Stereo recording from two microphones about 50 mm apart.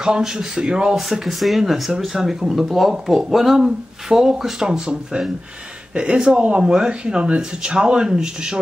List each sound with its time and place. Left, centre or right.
0.0 s speech: centre
0.9 s speech: centre